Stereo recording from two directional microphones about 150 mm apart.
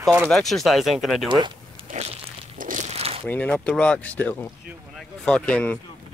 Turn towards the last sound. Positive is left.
turn(degrees=5)  # may be behind; listen again after turning